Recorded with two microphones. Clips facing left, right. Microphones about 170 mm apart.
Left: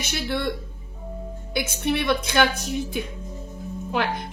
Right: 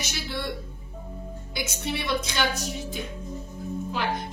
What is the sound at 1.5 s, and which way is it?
A woman's voice, 55° left (ahead or behind).